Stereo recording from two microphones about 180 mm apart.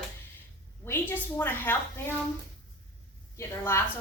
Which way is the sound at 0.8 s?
10° left (ahead or behind).